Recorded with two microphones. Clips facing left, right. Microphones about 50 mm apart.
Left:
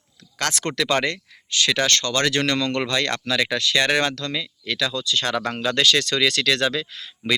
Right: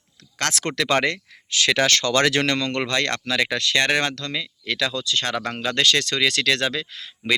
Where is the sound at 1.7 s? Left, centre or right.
Right.